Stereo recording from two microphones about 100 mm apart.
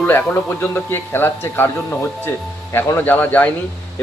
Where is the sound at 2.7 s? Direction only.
20° left (ahead or behind).